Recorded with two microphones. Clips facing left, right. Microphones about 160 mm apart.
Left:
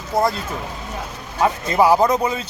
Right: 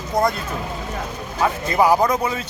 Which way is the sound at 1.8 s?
10° left (ahead or behind).